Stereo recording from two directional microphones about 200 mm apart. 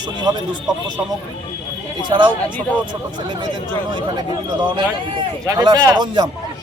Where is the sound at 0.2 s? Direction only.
20° right (ahead or behind).